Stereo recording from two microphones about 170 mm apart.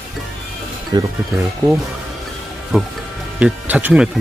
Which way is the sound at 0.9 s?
25° right (ahead or behind).